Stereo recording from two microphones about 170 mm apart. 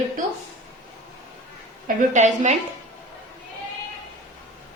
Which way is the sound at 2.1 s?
45° right (ahead or behind).